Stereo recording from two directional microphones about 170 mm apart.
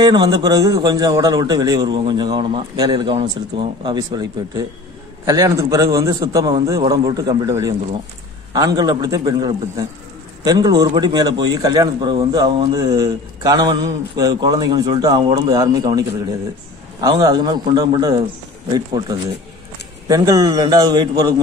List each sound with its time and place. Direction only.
0.0 s a man's voice: 25° right (ahead or behind)